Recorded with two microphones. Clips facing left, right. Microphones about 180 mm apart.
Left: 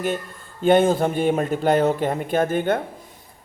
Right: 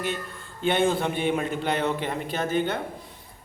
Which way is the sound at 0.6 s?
45° left (ahead or behind).